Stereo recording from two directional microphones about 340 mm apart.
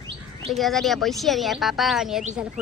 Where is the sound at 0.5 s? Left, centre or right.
Centre.